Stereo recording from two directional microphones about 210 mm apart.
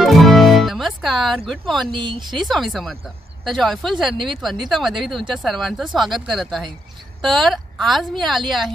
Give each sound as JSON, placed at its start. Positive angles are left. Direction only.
{"t": 0.0, "sound": "music", "side_deg": 0}
{"t": 1.9, "sound": "speech", "side_deg": -25}
{"t": 2.4, "sound": "a woman's voice", "side_deg": 0}